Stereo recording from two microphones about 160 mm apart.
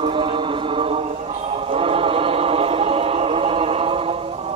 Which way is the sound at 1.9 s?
35° right (ahead or behind).